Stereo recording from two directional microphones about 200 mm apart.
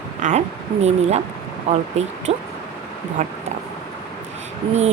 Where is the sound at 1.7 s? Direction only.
30° right (ahead or behind).